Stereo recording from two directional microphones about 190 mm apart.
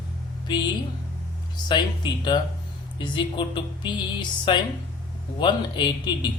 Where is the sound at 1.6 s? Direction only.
25° left (ahead or behind).